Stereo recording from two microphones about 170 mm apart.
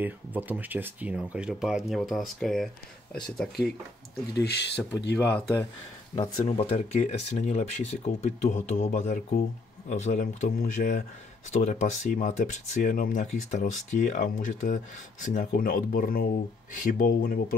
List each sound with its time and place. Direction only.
0.0 s speech: 10° right (ahead or behind)
4.3 s speech: 75° left (ahead or behind)
5.1 s speech: 10° left (ahead or behind)
6.4 s speech: 35° left (ahead or behind); by 17.6 s 60° left (ahead or behind)